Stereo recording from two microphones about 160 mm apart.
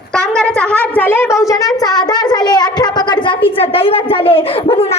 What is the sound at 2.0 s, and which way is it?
A child's voice, 25° left (ahead or behind).